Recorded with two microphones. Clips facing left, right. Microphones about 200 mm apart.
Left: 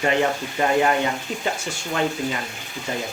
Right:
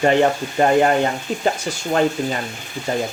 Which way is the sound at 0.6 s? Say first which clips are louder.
Right 5 dB; 45° right (ahead or behind).